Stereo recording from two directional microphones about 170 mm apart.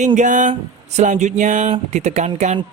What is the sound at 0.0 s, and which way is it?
Speech, 45° right (ahead or behind).